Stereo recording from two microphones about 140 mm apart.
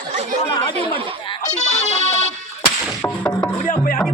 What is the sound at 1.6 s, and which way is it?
Music, 55° left (ahead or behind).